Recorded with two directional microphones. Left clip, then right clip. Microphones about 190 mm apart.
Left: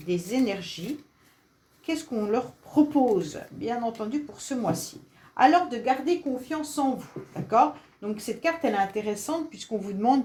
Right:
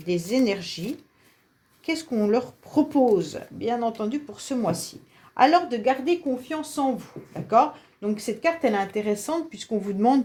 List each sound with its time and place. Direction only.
0.1 s speech: 45° right (ahead or behind)
1.9 s speech: 45° right (ahead or behind)